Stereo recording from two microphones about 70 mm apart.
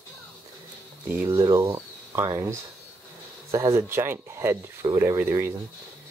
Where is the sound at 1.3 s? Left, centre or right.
Right.